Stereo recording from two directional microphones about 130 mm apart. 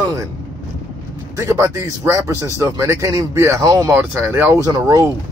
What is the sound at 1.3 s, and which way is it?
Speech, 20° right (ahead or behind).